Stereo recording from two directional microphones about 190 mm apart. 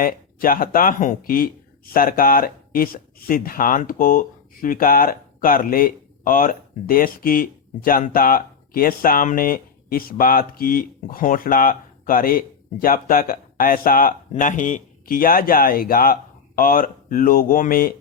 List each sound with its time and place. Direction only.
0.0 s speech: 50° left (ahead or behind)